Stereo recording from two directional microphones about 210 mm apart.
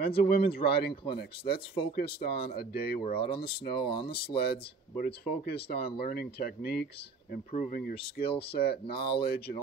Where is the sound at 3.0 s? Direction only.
25° left (ahead or behind).